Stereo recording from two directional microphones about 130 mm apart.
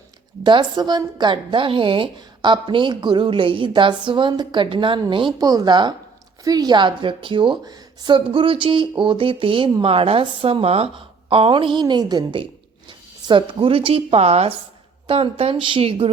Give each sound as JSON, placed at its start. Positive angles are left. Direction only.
{"t": 0.4, "sound": "a woman's voice", "side_deg": -35}